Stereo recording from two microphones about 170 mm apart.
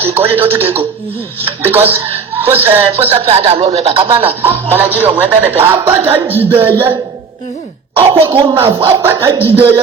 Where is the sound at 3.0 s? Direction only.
35° right (ahead or behind).